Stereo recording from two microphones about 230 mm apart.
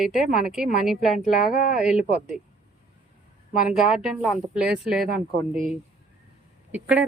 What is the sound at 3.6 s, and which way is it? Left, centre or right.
Speech, centre.